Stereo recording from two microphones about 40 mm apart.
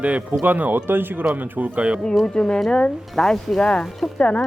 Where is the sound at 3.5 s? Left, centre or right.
Left.